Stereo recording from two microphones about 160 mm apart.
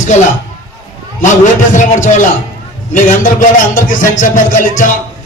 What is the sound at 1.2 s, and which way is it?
Speech, 50° left (ahead or behind).